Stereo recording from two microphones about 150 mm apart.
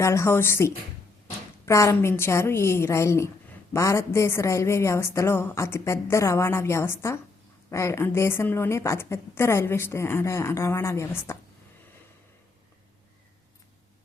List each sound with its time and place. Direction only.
0.0 s a woman's voice: 20° left (ahead or behind)